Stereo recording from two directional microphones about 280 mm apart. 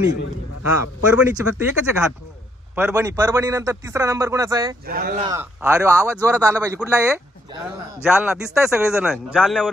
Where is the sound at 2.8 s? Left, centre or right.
Centre.